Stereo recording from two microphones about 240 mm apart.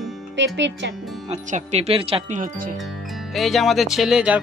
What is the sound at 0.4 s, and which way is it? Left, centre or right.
Speech, right.